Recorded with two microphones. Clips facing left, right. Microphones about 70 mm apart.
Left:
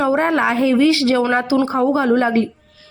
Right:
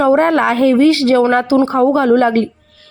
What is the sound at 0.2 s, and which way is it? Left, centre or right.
A woman's voice, right.